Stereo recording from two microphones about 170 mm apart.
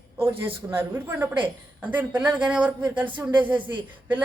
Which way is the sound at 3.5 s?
30° right (ahead or behind).